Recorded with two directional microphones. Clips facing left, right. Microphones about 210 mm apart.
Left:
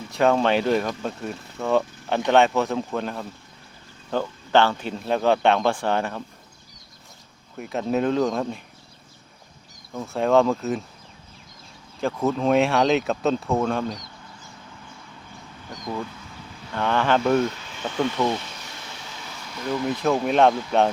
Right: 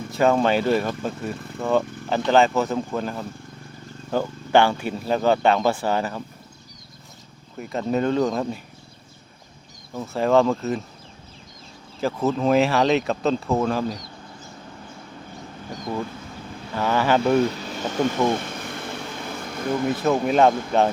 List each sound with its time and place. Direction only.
0.1 s speech: centre (ahead or behind)
7.6 s speech: centre (ahead or behind)
9.9 s speech: centre (ahead or behind)
11.9 s speech: 5° right (ahead or behind)
16.7 s speech: 5° right (ahead or behind)
17.7 s vehicle: 40° right (ahead or behind)
20.0 s speech: centre (ahead or behind)